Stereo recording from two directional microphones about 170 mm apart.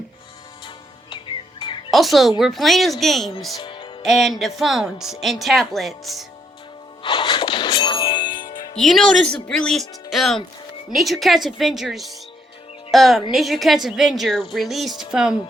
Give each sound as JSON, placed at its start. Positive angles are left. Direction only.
{"t": 1.1, "sound": "music", "side_deg": 30}
{"t": 1.9, "sound": "a woman's voice", "side_deg": 0}
{"t": 3.6, "sound": "music", "side_deg": 30}
{"t": 4.0, "sound": "a woman's voice", "side_deg": 0}
{"t": 7.0, "sound": "music", "side_deg": 30}
{"t": 8.3, "sound": "music", "side_deg": 55}
{"t": 8.7, "sound": "a woman's voice", "side_deg": 0}